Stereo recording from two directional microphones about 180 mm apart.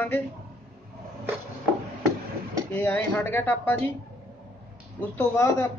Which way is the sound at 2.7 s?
10° left (ahead or behind).